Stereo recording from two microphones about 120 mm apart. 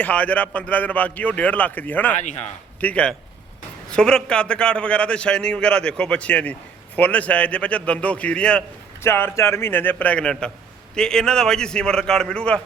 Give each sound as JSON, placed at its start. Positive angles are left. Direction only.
{"t": 0.0, "sound": "a man's voice", "side_deg": 10}
{"t": 9.0, "sound": "a man's voice", "side_deg": 20}